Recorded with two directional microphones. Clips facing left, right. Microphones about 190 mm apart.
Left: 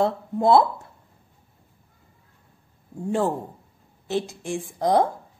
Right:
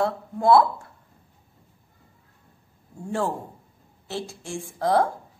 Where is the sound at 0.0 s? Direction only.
25° left (ahead or behind).